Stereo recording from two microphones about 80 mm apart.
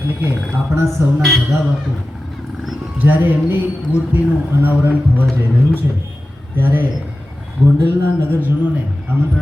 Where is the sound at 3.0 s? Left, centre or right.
Right.